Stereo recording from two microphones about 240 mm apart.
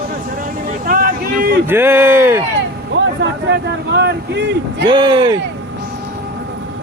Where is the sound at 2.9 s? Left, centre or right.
Right.